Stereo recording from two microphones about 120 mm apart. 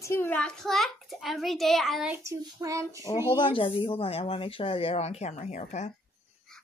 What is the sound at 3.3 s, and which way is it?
Speech, 45° left (ahead or behind).